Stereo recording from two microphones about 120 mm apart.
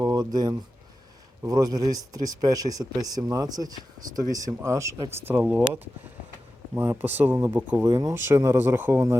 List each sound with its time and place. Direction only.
0.0 s a sound: 35° right (ahead or behind)
1.5 s speech: 35° right (ahead or behind); by 7.9 s 15° right (ahead or behind)
7.9 s speech: 30° right (ahead or behind)